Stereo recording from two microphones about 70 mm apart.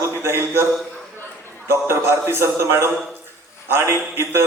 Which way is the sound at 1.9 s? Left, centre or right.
Right.